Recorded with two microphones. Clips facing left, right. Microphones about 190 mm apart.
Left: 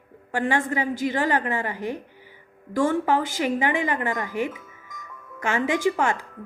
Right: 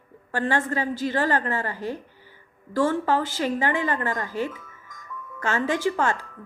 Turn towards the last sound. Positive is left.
turn(degrees=15)  # may be behind; listen again after turning